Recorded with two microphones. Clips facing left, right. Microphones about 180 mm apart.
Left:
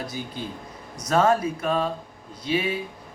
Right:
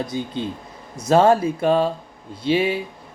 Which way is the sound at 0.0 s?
20° right (ahead or behind).